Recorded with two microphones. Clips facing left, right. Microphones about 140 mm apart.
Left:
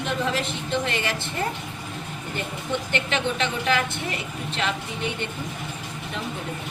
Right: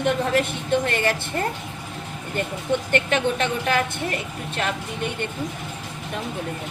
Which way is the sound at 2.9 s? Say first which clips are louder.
Right 4 dB; 50° right (ahead or behind).